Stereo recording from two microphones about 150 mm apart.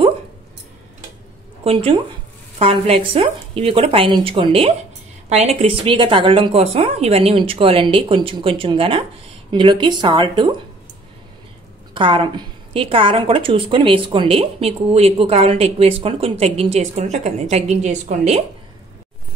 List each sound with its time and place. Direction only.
1.6 s a woman's voice: 40° right (ahead or behind)
11.9 s a woman's voice: 35° right (ahead or behind)